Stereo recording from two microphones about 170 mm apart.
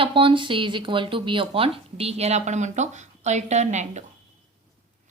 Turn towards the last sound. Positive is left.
turn(degrees=-45)  # may be behind; listen again after turning